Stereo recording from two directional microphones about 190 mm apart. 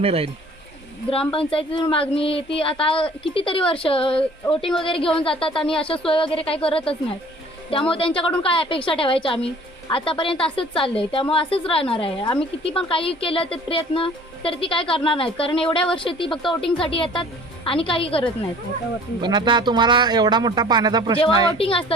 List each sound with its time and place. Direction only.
0.0 s speech: 30° right (ahead or behind)
1.3 s speech: 30° left (ahead or behind)
4.2 s speech: 5° left (ahead or behind)
4.7 s speech: 25° left (ahead or behind)
19.2 s speech: 25° right (ahead or behind)
21.6 s speech: 30° left (ahead or behind)